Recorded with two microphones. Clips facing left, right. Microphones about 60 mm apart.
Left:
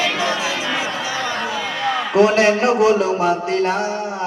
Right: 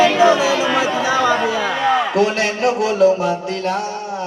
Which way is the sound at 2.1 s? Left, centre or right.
Centre.